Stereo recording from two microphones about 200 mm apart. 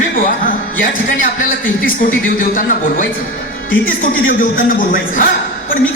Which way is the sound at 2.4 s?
40° left (ahead or behind).